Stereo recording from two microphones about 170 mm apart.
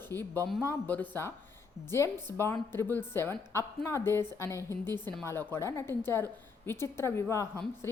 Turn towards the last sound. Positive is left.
turn(degrees=15)  # may be behind; listen again after turning